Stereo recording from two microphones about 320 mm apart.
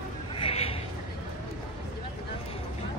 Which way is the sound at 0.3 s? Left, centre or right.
Centre.